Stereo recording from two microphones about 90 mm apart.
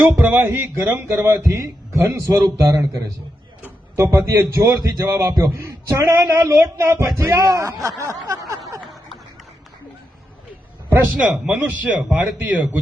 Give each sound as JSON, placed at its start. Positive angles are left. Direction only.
{"t": 0.2, "sound": "speech", "side_deg": -25}
{"t": 11.2, "sound": "speech", "side_deg": -10}